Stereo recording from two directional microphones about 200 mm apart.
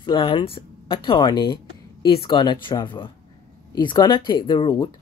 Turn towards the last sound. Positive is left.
turn(degrees=25)  # may be behind; listen again after turning